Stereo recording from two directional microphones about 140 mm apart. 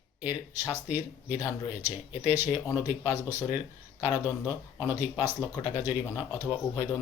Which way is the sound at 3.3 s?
30° left (ahead or behind).